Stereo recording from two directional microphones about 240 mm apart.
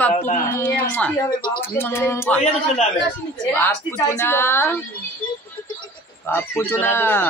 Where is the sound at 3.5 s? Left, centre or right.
Centre.